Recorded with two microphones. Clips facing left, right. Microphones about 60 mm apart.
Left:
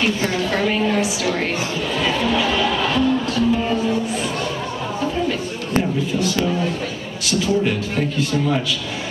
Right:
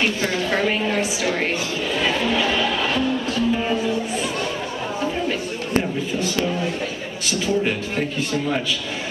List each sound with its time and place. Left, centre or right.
0.4 s a man's voice: centre
2.0 s music: centre
5.8 s a sound: centre
7.2 s a man's voice: centre